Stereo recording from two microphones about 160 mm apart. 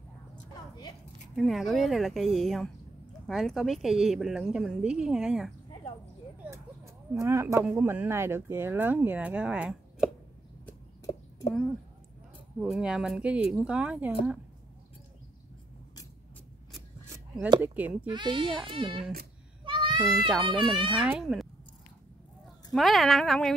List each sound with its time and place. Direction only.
1.3 s a woman's voice: centre (ahead or behind)
6.4 s a sound: 20° right (ahead or behind)
7.7 s speech: 15° right (ahead or behind)
11.1 s a sound: 25° left (ahead or behind)
12.5 s a woman's voice: 5° right (ahead or behind)
17.6 s speech: 10° right (ahead or behind)
18.0 s a child's voice: 30° right (ahead or behind)
19.6 s goat: 30° right (ahead or behind)
20.7 s a child's voice: 30° right (ahead or behind)
21.0 s a woman's voice: 5° right (ahead or behind)
22.7 s a woman's voice: centre (ahead or behind)